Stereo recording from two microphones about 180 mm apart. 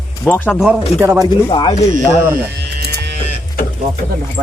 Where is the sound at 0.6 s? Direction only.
5° right (ahead or behind).